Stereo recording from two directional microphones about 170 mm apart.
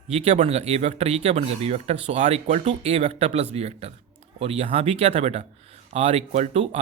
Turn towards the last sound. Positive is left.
turn(degrees=-40)  # may be behind; listen again after turning